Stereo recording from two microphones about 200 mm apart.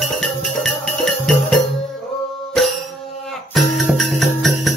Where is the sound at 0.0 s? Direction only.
Centre (ahead or behind).